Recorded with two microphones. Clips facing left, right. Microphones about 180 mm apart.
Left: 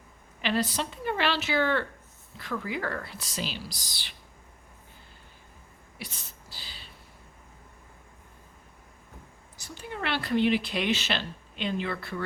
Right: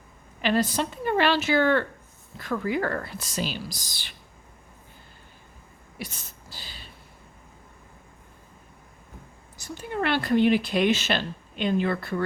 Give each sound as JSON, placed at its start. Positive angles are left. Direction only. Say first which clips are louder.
{"t": 0.4, "sound": "speech", "louder": "right 4 dB", "side_deg": -45}
{"t": 6.0, "sound": "a sound", "louder": "right 5 dB", "side_deg": -45}
{"t": 9.6, "sound": "speech", "louder": "right 7 dB", "side_deg": -45}